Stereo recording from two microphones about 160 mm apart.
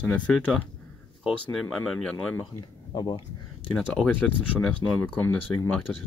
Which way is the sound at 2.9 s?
25° left (ahead or behind).